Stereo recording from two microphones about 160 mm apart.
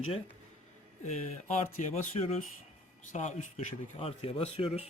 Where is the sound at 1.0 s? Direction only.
45° left (ahead or behind).